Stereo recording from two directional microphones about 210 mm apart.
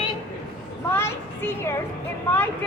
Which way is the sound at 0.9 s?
10° left (ahead or behind).